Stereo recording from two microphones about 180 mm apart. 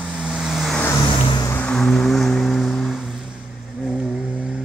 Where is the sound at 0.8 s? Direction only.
20° left (ahead or behind).